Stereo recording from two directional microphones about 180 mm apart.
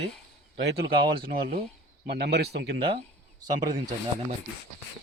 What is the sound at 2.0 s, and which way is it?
Speech, 65° right (ahead or behind).